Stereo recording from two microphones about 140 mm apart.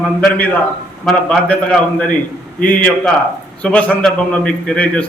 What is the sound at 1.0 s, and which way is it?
A man's voice, 5° left (ahead or behind).